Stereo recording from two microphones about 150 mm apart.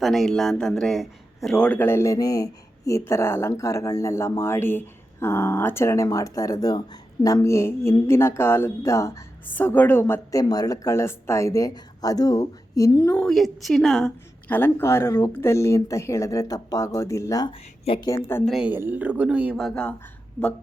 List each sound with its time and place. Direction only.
0.0 s a man's voice: centre (ahead or behind); by 13.1 s 25° left (ahead or behind)
13.1 s a man's voice: centre (ahead or behind); by 18.4 s 20° left (ahead or behind)
18.4 s speech: 5° right (ahead or behind)